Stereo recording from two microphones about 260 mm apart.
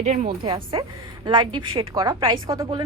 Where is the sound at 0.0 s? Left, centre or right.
Right.